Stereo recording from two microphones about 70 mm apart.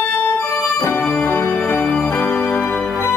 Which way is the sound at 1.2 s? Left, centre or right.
Left.